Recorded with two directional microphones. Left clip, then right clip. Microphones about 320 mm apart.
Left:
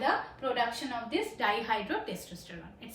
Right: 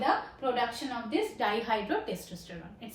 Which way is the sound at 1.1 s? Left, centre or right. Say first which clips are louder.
Right 1 dB; centre.